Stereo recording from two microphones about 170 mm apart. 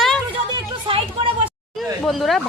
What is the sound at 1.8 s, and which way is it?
Speech, centre (ahead or behind).